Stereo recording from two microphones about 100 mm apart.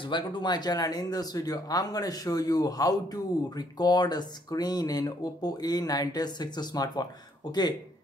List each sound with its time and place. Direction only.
0.0 s speech: 55° left (ahead or behind)